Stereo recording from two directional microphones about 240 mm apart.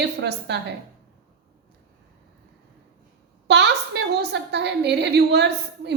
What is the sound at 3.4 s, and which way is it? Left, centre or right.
A woman's voice, right.